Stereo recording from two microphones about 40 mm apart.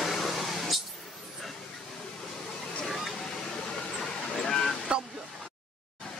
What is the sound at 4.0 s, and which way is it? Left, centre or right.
Vehicle, centre.